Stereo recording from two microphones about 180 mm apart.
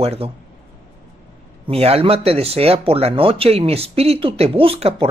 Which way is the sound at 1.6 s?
35° right (ahead or behind).